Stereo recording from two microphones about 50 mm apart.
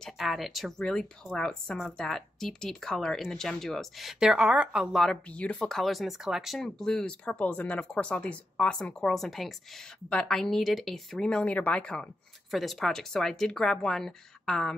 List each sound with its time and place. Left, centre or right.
0.2 s speech: centre
0.7 s speech: centre
4.2 s a woman's voice: centre
4.9 s speech: centre
5.3 s speech: left
5.7 s speech: centre
6.6 s speech: centre
11.1 s speech: centre
11.5 s speech: left
11.8 s speech: centre
12.4 s speech: centre